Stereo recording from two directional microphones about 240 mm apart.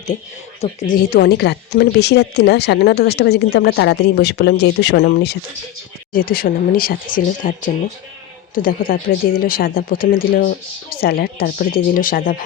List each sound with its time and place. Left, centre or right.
0.6 s speech: left
1.1 s a woman's voice: left
8.5 s speech: left